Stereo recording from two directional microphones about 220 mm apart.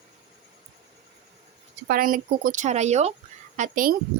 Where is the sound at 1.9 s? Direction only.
40° right (ahead or behind).